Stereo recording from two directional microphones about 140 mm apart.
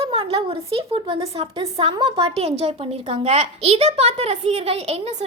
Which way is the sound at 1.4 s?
40° right (ahead or behind).